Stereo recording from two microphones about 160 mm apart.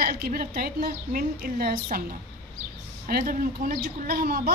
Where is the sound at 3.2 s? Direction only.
55° right (ahead or behind).